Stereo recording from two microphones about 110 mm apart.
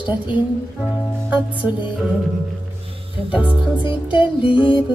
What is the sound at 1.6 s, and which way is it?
Music, 10° right (ahead or behind).